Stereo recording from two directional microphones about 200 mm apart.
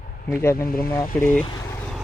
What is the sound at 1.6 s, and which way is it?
Vehicle, 10° left (ahead or behind).